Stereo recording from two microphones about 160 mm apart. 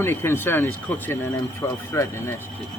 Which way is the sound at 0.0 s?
15° left (ahead or behind).